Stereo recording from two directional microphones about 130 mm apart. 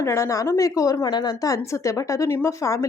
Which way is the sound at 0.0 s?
20° left (ahead or behind).